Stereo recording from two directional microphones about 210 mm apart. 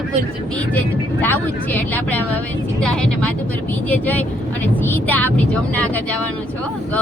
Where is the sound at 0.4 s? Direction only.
5° left (ahead or behind).